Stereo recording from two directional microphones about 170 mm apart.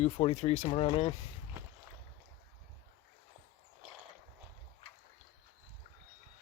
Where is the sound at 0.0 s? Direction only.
40° left (ahead or behind).